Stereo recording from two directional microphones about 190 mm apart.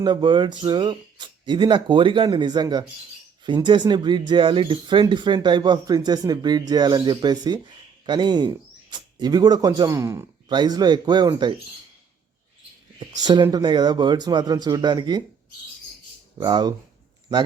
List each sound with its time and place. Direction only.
0.0 s speech: 25° right (ahead or behind)
13.2 s speech: 20° right (ahead or behind)
16.4 s speech: 20° right (ahead or behind)